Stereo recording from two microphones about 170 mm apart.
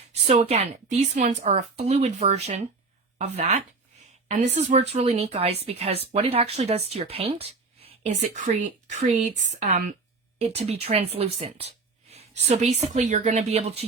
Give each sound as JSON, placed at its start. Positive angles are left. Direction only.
{"t": 0.3, "sound": "a woman's voice", "side_deg": -40}